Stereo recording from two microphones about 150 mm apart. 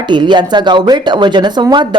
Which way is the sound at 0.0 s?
30° right (ahead or behind).